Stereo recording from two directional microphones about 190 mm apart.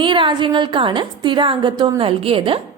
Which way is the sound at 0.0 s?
25° right (ahead or behind).